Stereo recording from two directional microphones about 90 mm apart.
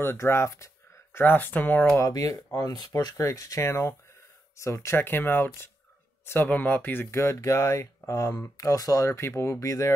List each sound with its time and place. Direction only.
0.0 s speech: 25° left (ahead or behind)
2.0 s speech: 40° left (ahead or behind)